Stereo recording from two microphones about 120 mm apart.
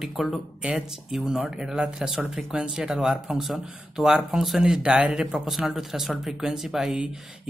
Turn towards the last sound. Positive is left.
turn(degrees=-5)  # may be behind; listen again after turning